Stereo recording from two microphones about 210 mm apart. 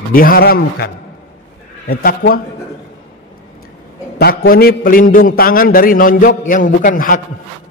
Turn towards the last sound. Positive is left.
turn(degrees=40)  # may be behind; listen again after turning